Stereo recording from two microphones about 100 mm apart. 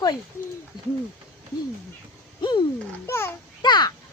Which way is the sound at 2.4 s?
50° left (ahead or behind).